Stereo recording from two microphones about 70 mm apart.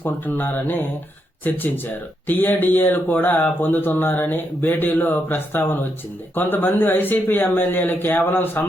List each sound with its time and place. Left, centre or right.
0.0 s speech: left